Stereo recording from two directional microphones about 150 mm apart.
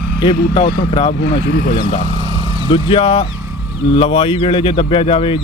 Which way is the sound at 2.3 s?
30° right (ahead or behind).